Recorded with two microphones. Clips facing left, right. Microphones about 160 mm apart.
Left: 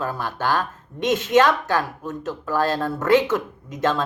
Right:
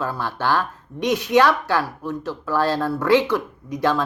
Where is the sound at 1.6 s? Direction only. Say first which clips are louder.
Right 1 dB; 45° left (ahead or behind).